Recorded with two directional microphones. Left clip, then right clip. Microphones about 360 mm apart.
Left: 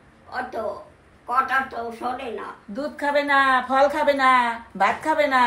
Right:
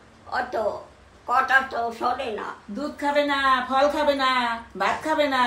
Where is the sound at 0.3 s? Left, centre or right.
Right.